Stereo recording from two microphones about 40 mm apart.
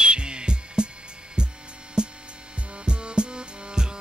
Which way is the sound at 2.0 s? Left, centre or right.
Right.